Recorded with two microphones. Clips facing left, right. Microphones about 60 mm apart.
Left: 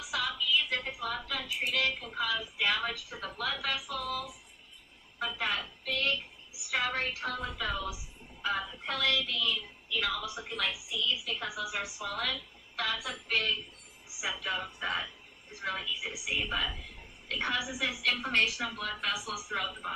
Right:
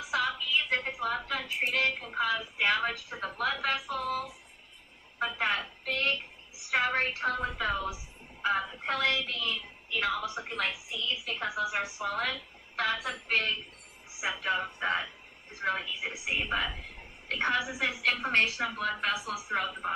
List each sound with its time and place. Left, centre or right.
0.0 s a woman's voice: right